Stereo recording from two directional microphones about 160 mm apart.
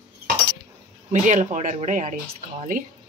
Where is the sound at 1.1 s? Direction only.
50° right (ahead or behind).